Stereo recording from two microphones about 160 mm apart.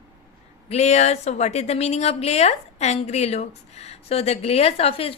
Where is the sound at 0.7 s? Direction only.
45° left (ahead or behind).